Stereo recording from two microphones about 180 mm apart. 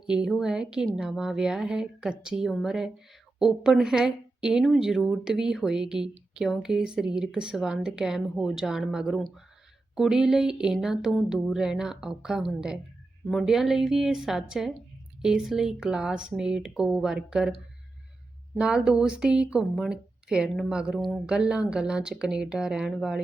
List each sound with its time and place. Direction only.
0.1 s a woman's voice: 5° right (ahead or behind)
18.6 s a woman's voice: 5° right (ahead or behind)